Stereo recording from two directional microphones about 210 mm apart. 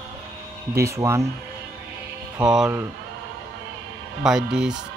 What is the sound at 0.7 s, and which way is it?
Speech, 15° right (ahead or behind).